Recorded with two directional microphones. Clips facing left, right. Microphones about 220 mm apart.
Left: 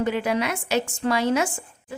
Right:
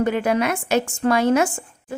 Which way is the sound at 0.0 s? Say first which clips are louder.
Right 4 dB; 50° right (ahead or behind).